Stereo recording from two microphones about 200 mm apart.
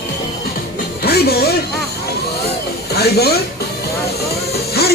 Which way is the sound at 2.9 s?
50° left (ahead or behind).